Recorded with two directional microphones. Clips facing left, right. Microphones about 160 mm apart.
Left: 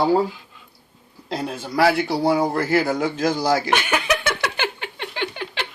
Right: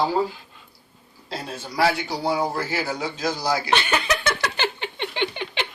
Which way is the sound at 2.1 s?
55° left (ahead or behind).